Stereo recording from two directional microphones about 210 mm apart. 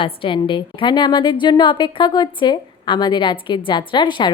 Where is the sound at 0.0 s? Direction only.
25° left (ahead or behind).